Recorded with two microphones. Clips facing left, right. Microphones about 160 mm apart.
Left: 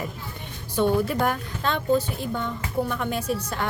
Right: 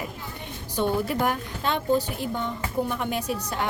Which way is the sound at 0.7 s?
15° right (ahead or behind).